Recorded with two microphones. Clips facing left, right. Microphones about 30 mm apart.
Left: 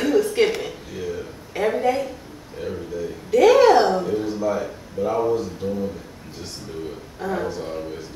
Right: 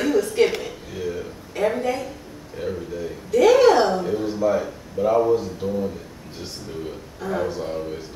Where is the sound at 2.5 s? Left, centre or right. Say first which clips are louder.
Right 1 dB; centre.